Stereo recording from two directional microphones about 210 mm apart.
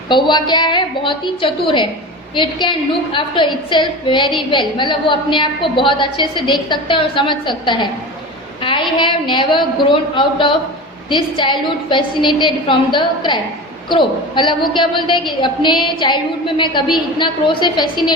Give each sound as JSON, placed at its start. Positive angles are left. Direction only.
{"t": 0.1, "sound": "a woman's voice", "side_deg": 20}